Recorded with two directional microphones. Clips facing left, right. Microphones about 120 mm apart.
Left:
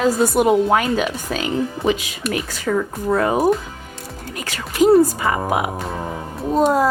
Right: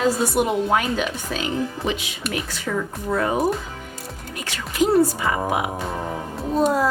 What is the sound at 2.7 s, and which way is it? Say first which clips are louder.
Speech: left 6 dB; 50° left (ahead or behind).